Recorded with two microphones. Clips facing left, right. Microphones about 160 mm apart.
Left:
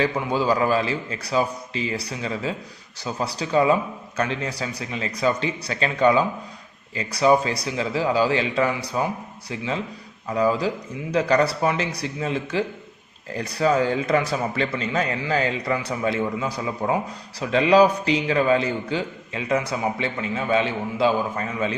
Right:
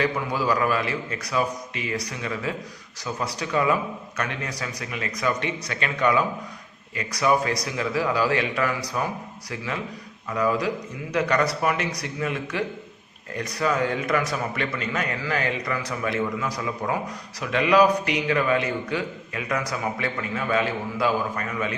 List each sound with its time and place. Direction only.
0.0 s a man's voice: 25° left (ahead or behind)